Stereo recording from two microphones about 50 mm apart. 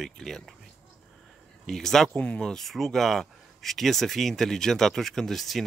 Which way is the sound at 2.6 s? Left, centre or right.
Centre.